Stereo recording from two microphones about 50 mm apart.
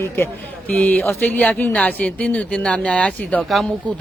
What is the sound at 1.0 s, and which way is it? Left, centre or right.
Speech, left.